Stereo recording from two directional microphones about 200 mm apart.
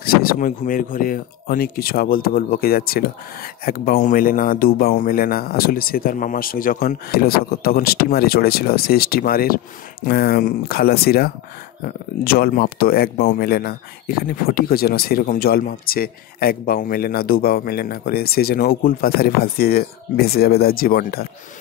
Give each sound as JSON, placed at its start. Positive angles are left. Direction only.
{"t": 0.0, "sound": "speech", "side_deg": 50}